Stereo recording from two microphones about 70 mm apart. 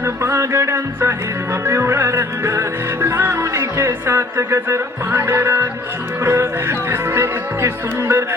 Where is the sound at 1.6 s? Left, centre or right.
Right.